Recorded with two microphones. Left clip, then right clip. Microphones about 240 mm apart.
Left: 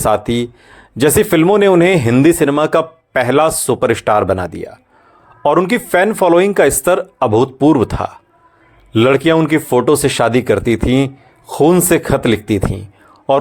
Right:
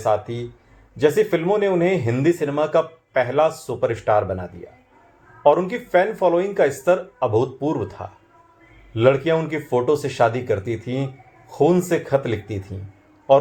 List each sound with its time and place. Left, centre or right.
0.0 s speech: left